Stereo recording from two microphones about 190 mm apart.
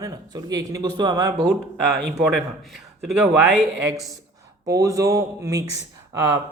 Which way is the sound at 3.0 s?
5° right (ahead or behind).